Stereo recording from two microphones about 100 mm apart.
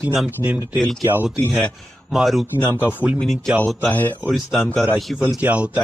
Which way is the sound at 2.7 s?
15° right (ahead or behind).